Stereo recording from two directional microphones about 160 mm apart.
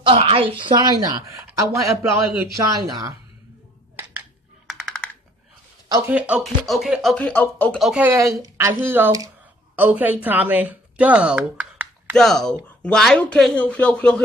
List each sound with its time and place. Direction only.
0.0 s a woman's voice: 35° right (ahead or behind)
4.6 s typing: 5° left (ahead or behind)
5.9 s speech: 20° right (ahead or behind)
6.1 s speech: 10° right (ahead or behind); by 7.8 s 10° left (ahead or behind)
7.8 s speech: 10° right (ahead or behind)
12.2 s speech: 5° left (ahead or behind)